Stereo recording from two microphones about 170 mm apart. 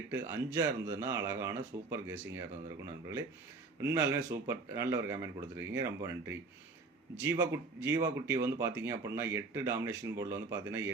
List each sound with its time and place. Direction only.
0.1 s speech: 15° right (ahead or behind)
3.8 s speech: 15° right (ahead or behind)